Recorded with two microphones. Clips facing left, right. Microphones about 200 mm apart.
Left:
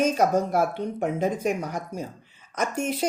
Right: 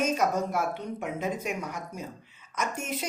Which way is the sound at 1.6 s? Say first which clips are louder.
Left 5 dB; 35° left (ahead or behind).